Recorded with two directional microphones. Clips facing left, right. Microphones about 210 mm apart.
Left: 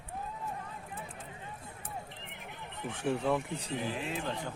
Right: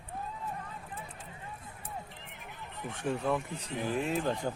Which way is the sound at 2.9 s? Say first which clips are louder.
Left 1 dB; 5° left (ahead or behind).